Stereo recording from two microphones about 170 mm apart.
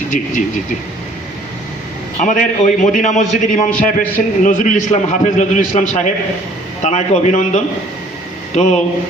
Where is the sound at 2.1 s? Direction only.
50° left (ahead or behind).